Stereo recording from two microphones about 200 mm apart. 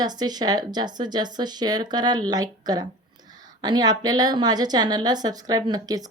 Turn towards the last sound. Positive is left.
turn(degrees=-20)  # may be behind; listen again after turning